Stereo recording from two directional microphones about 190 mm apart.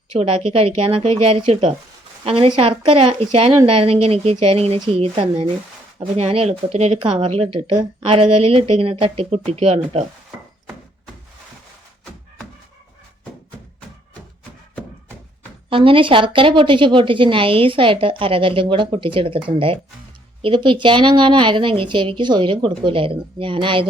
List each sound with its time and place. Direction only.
0.2 s a woman's voice: 30° right (ahead or behind)
15.7 s a woman's voice: 25° right (ahead or behind)